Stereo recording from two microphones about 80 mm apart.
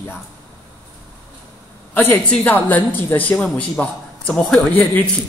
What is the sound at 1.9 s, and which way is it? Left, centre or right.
A man's voice, left.